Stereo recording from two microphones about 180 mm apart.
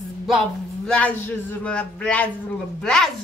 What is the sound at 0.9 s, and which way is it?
A woman's voice, 10° left (ahead or behind).